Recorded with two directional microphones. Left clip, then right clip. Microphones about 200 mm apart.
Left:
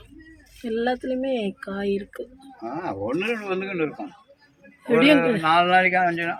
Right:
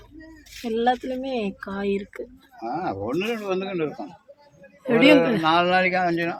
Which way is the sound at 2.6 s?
30° right (ahead or behind).